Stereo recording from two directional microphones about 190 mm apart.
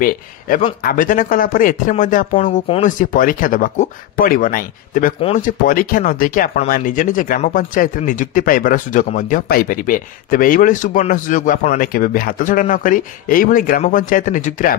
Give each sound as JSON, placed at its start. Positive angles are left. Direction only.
{"t": 0.0, "sound": "speech", "side_deg": 45}